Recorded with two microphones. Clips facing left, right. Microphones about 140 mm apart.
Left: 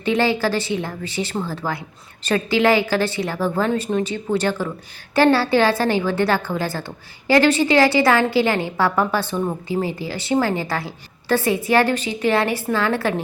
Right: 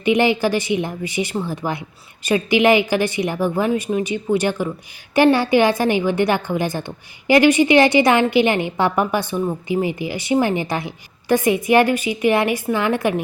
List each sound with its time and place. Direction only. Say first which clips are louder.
0.0 s a woman's voice: right 2 dB; 15° right (ahead or behind)